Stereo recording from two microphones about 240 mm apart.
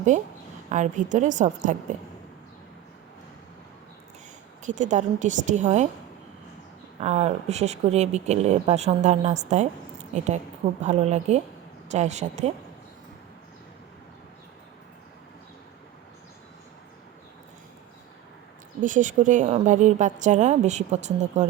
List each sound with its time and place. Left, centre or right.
0.1 s a woman's voice: right
4.6 s a woman's voice: right
7.0 s speech: right
18.8 s speech: right